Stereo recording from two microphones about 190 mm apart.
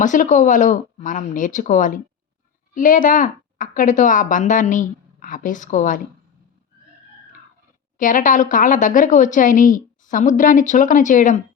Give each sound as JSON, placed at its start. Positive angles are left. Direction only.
{"t": 0.0, "sound": "a woman's voice", "side_deg": 40}
{"t": 7.9, "sound": "a woman's voice", "side_deg": 45}